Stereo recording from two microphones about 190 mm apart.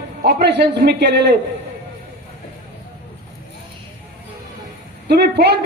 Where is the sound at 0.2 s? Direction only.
60° right (ahead or behind).